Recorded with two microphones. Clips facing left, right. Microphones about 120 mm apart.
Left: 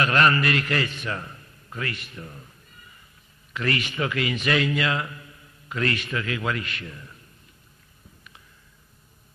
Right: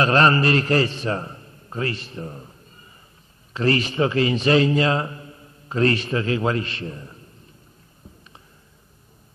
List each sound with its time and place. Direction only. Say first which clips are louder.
0.0 s a man's voice: right 4 dB; 30° right (ahead or behind)